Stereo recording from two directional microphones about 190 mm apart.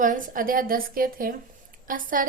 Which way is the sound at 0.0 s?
45° right (ahead or behind).